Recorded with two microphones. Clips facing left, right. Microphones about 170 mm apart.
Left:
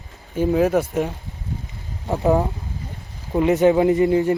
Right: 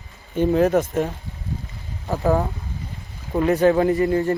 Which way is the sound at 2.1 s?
20° left (ahead or behind).